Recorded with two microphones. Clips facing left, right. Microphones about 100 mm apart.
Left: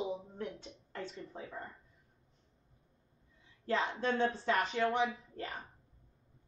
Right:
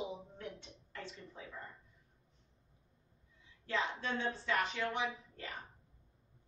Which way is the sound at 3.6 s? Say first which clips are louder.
Left 4 dB; 35° left (ahead or behind).